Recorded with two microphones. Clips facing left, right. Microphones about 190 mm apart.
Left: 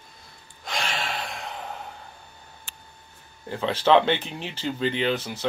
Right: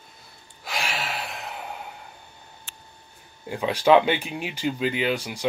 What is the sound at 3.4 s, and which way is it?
Speech, 15° right (ahead or behind).